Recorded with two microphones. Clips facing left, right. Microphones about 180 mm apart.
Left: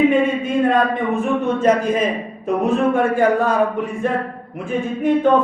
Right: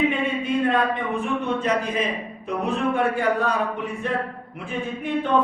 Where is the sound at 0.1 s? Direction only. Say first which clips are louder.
Left 7 dB; 45° left (ahead or behind).